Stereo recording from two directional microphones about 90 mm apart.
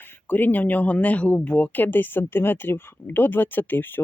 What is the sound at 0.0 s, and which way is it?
Speech, 25° left (ahead or behind).